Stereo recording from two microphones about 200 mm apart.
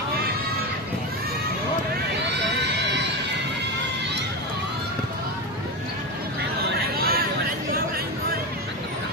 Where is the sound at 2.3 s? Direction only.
60° right (ahead or behind).